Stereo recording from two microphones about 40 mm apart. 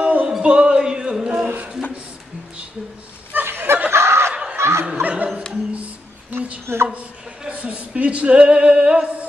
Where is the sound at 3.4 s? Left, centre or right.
Right.